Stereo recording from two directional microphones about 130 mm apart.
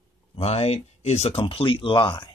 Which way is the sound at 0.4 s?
50° left (ahead or behind).